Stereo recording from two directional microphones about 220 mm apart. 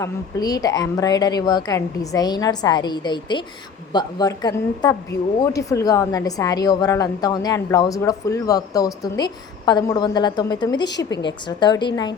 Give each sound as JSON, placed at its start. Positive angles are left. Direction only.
{"t": 0.0, "sound": "a woman's voice", "side_deg": 15}